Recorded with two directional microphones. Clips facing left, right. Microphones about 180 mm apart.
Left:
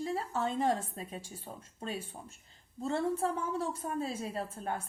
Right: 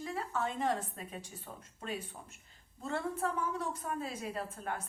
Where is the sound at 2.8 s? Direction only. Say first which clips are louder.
Left 4 dB; 30° left (ahead or behind).